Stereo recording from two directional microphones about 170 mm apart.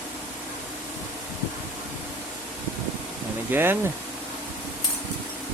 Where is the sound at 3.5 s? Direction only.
10° right (ahead or behind).